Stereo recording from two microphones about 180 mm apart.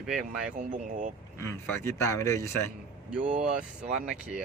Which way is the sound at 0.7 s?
45° right (ahead or behind).